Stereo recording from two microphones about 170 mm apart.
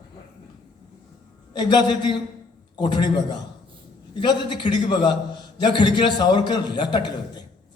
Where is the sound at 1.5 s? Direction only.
25° left (ahead or behind).